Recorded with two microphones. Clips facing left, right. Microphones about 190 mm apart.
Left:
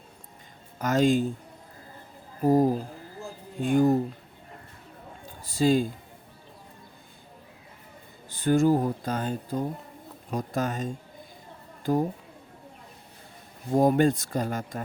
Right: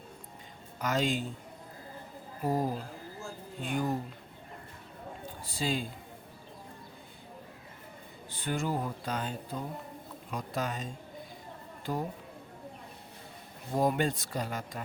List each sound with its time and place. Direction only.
0.8 s speech: 45° left (ahead or behind)
2.4 s speech: 45° left (ahead or behind)
5.5 s speech: 45° left (ahead or behind)
8.3 s speech: 45° left (ahead or behind)
13.7 s speech: 45° left (ahead or behind)